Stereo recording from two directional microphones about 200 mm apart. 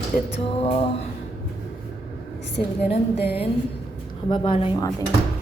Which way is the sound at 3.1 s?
55° left (ahead or behind).